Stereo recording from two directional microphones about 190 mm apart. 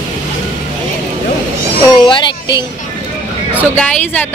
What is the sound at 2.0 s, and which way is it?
Speech, 25° left (ahead or behind).